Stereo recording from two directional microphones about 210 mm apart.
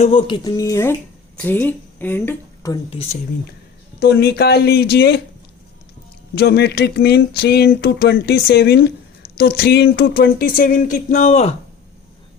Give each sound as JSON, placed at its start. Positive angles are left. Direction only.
{"t": 0.0, "sound": "a woman's voice", "side_deg": 25}
{"t": 4.0, "sound": "speech", "side_deg": 50}
{"t": 6.3, "sound": "speech", "side_deg": 50}